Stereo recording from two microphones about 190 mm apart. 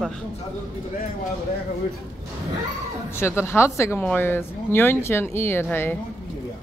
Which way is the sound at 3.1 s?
15° left (ahead or behind).